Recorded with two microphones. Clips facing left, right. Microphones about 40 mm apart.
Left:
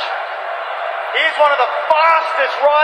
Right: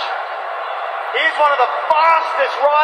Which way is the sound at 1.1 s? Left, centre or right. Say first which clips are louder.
Left 1 dB; left.